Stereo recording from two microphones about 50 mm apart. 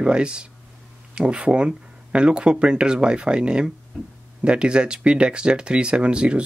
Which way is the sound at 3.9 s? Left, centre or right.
Centre.